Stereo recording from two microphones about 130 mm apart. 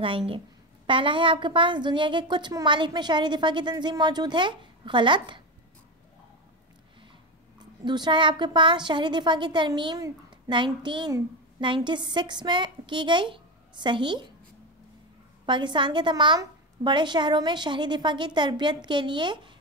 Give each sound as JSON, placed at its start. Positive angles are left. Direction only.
{"t": 0.8, "sound": "a woman's voice", "side_deg": -40}
{"t": 7.5, "sound": "a woman's voice", "side_deg": -35}
{"t": 15.4, "sound": "a woman's voice", "side_deg": -35}